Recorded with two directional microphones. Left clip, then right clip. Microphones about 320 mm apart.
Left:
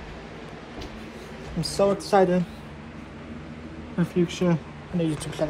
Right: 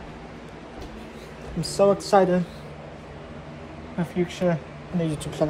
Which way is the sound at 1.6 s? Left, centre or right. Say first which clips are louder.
Right 3 dB; centre.